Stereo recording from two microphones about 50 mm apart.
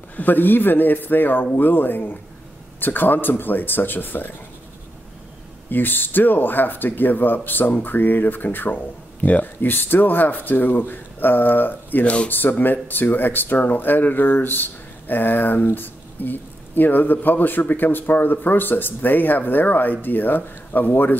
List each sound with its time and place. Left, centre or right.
0.1 s speech: left
5.7 s speech: left